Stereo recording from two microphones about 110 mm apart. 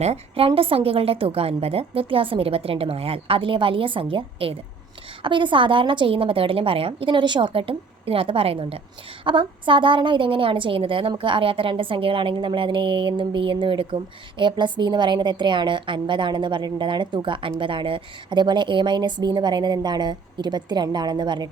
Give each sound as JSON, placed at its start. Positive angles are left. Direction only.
{"t": 0.0, "sound": "a woman's voice", "side_deg": -65}